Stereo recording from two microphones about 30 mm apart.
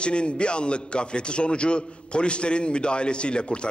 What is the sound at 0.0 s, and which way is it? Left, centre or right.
A man's voice, left.